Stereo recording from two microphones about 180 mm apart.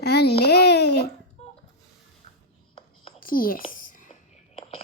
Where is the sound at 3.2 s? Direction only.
50° left (ahead or behind).